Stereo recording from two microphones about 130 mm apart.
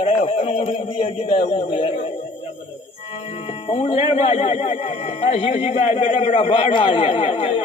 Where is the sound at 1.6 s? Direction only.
45° left (ahead or behind).